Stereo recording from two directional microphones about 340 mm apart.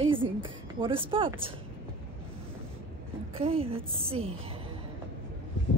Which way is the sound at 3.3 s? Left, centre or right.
Centre.